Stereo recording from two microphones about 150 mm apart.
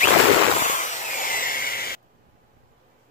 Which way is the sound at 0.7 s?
55° left (ahead or behind).